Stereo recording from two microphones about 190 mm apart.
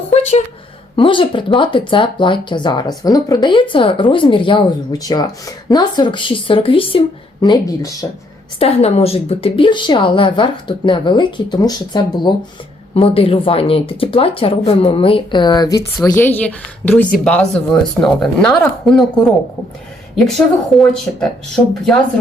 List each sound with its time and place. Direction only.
0.1 s a sound: 35° left (ahead or behind)
0.9 s speech: 25° left (ahead or behind)
7.4 s speech: 20° left (ahead or behind)
8.5 s speech: 30° left (ahead or behind)
16.0 s a woman's voice: 10° left (ahead or behind)
20.7 s speech: centre (ahead or behind)